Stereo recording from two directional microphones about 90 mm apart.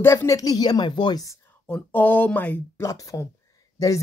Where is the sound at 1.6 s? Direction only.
15° left (ahead or behind).